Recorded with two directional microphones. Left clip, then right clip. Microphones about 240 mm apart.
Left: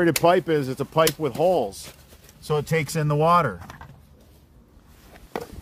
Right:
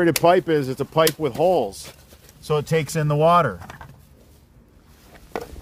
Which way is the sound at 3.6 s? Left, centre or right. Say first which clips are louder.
Right 3 dB; right.